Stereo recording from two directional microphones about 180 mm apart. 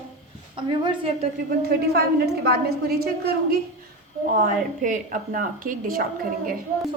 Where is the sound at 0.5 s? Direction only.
30° right (ahead or behind).